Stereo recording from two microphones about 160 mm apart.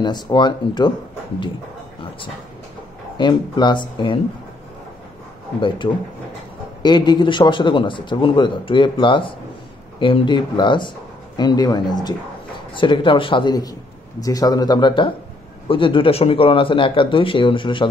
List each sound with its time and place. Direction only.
0.0 s speech: 25° left (ahead or behind)
3.2 s speech: 30° left (ahead or behind)
5.8 s a man's voice: 30° left (ahead or behind)